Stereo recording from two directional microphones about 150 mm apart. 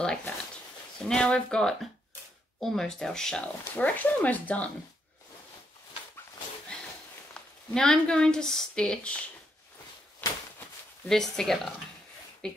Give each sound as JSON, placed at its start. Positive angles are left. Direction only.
{"t": 0.0, "sound": "speech", "side_deg": 5}
{"t": 6.7, "sound": "a sound", "side_deg": 5}
{"t": 7.7, "sound": "speech", "side_deg": 5}
{"t": 11.1, "sound": "speech", "side_deg": 5}